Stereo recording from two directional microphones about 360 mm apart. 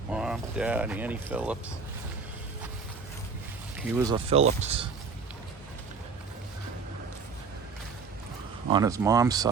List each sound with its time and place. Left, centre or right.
0.1 s speech: centre
3.8 s speech: centre
8.7 s speech: centre